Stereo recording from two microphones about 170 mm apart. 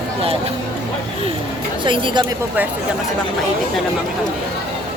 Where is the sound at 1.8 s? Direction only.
30° right (ahead or behind).